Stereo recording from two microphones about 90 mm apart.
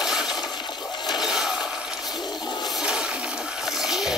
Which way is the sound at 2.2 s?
55° left (ahead or behind).